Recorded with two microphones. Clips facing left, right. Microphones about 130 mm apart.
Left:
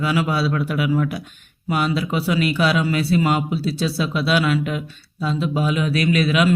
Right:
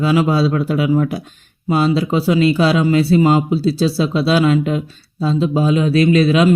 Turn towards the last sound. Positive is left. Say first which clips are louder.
# right 6 dB
turn(degrees=-30)  # may be behind; listen again after turning